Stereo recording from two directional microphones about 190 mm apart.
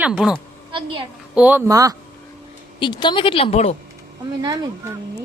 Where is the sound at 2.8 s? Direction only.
25° left (ahead or behind).